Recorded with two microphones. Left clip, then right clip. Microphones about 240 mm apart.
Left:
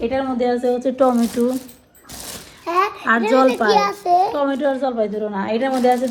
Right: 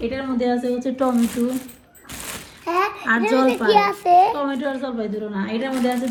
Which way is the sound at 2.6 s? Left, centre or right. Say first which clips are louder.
Left 2 dB; right.